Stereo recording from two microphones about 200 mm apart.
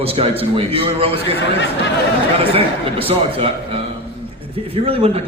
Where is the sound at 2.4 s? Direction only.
30° right (ahead or behind).